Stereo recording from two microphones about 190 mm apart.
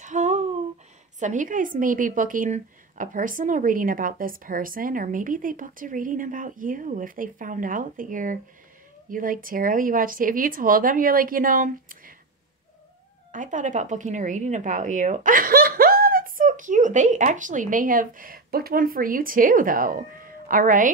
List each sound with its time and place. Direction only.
0.0 s a sound: 40° right (ahead or behind)
1.2 s speech: 40° right (ahead or behind)
13.3 s speech: 40° right (ahead or behind)